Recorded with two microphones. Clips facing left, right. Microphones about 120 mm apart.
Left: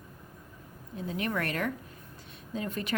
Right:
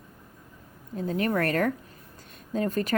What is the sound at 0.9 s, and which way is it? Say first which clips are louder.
A woman's voice: right 6 dB; 40° right (ahead or behind).